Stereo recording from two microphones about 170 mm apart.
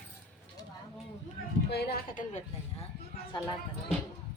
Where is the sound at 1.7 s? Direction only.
70° left (ahead or behind); by 2.4 s 55° left (ahead or behind).